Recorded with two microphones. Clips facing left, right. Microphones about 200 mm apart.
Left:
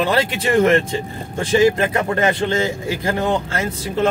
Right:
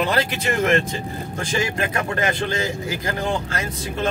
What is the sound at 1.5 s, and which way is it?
A man's voice, 25° left (ahead or behind).